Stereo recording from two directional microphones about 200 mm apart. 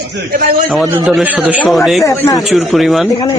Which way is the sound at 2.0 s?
15° left (ahead or behind).